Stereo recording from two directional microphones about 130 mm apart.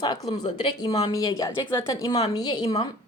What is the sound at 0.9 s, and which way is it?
Speech, 50° left (ahead or behind).